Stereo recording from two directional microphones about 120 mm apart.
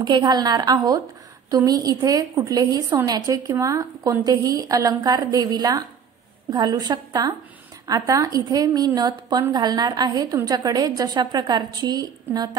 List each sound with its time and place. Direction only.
0.0 s a woman's voice: 35° right (ahead or behind)